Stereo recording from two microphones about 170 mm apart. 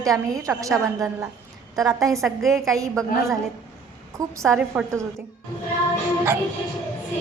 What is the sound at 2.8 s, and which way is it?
Speech, 20° right (ahead or behind).